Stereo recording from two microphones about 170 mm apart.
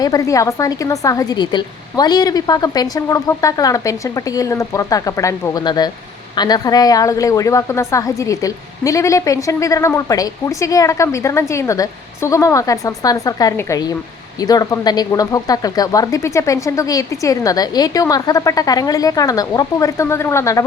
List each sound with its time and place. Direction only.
0.0 s a woman's voice: 20° left (ahead or behind)